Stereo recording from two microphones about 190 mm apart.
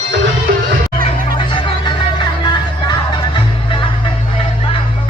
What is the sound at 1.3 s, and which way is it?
Music, 25° left (ahead or behind).